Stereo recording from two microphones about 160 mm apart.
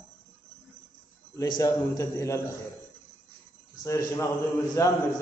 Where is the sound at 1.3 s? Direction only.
25° left (ahead or behind).